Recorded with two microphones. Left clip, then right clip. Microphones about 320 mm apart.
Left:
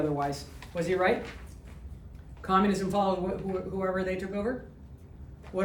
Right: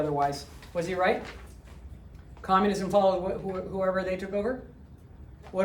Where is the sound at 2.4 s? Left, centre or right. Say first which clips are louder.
Right 2 dB; centre.